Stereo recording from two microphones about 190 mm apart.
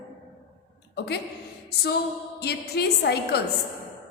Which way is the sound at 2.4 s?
60° left (ahead or behind).